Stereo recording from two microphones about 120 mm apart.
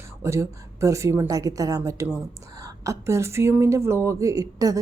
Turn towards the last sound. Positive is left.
turn(degrees=-30)  # may be behind; listen again after turning